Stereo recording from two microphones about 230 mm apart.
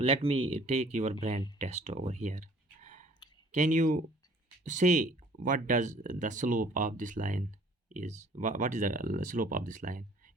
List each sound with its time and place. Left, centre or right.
0.0 s speech: right